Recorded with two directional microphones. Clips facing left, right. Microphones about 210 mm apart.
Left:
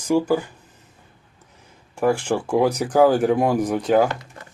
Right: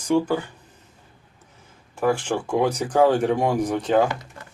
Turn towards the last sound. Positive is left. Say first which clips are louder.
# left 2 dB
turn(degrees=5)  # may be behind; listen again after turning